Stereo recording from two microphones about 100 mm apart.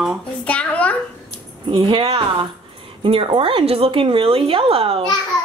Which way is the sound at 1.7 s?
55° right (ahead or behind).